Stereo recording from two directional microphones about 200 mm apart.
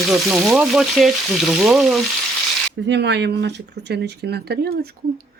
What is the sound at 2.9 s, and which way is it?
Speech, 60° right (ahead or behind).